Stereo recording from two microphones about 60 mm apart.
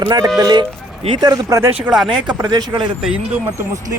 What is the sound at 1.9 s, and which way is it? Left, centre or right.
Speech, right.